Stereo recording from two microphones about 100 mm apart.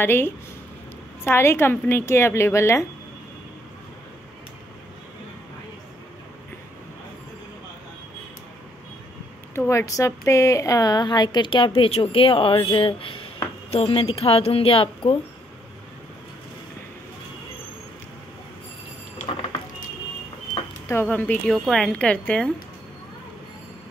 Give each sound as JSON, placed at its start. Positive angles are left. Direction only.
{"t": 0.0, "sound": "speech", "side_deg": 20}
{"t": 9.7, "sound": "a woman's voice", "side_deg": 30}
{"t": 20.9, "sound": "a woman's voice", "side_deg": 15}